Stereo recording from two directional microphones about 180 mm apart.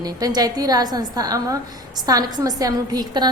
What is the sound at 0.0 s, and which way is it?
A woman's voice, 20° right (ahead or behind).